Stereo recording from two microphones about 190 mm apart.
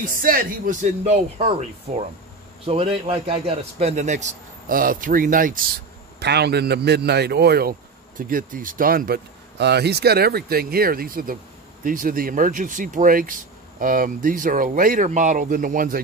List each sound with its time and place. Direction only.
0.0 s a man's voice: 45° right (ahead or behind)
6.1 s a man's voice: 60° right (ahead or behind)